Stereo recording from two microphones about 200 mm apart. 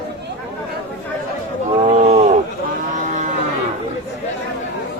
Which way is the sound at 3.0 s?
40° right (ahead or behind).